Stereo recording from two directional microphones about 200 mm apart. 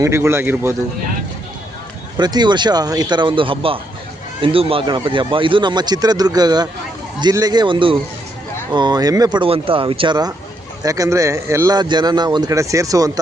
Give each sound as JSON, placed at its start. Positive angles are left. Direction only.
{"t": 0.0, "sound": "speech", "side_deg": -15}
{"t": 2.1, "sound": "speech", "side_deg": -20}